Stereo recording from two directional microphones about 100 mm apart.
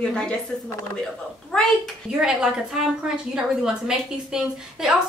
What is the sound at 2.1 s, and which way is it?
A woman's voice, 5° right (ahead or behind).